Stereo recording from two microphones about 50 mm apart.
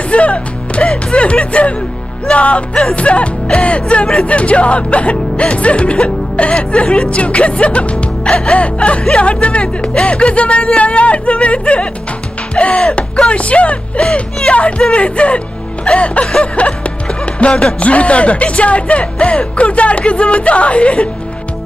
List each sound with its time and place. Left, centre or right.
0.1 s speech: left